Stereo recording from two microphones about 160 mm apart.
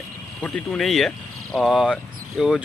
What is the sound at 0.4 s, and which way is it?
Speech, centre (ahead or behind).